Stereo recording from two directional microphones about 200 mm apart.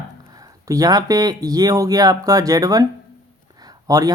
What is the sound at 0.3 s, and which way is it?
Speech, 15° right (ahead or behind).